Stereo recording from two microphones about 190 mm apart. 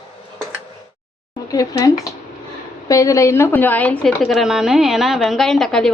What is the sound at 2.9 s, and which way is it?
A woman's voice, 15° left (ahead or behind).